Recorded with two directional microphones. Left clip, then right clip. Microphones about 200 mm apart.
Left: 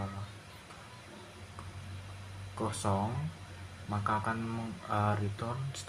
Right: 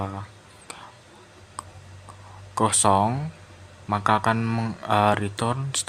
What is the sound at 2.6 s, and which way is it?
Speech, 55° right (ahead or behind).